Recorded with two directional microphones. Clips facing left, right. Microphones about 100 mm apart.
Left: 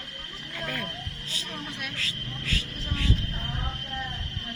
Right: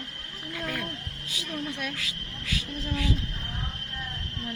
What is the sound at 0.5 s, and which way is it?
Speech, 5° right (ahead or behind).